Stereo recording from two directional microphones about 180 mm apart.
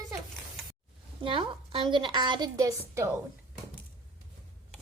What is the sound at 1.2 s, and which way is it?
A woman's voice, 30° right (ahead or behind).